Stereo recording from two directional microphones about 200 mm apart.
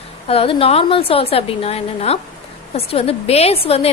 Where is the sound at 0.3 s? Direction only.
30° left (ahead or behind).